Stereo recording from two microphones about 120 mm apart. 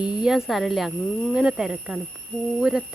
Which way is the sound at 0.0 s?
5° right (ahead or behind).